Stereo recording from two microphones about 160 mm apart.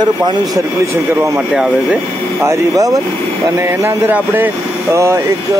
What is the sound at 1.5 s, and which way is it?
Speech, 5° right (ahead or behind).